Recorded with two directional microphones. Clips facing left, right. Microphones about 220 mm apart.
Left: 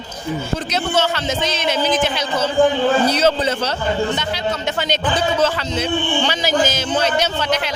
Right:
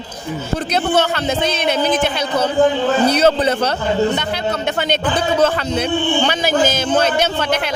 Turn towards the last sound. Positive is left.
turn(degrees=-50)  # may be behind; listen again after turning